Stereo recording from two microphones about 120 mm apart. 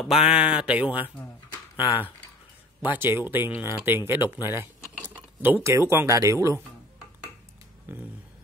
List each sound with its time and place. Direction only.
0.0 s speech: 5° right (ahead or behind)
2.8 s speech: 15° right (ahead or behind)
7.9 s speech: 15° right (ahead or behind)